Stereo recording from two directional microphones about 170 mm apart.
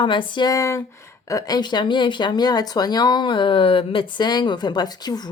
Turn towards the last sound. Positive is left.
turn(degrees=25)  # may be behind; listen again after turning